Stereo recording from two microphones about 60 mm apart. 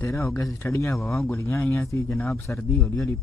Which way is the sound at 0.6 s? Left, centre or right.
Left.